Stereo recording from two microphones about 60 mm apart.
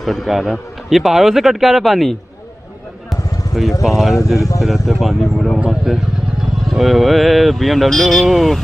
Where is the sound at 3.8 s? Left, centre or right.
Centre.